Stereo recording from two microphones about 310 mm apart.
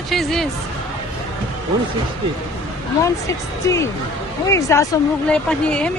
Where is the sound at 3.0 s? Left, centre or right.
Centre.